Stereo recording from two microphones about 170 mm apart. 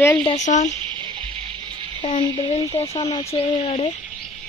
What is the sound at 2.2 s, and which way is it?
Speech, 30° left (ahead or behind).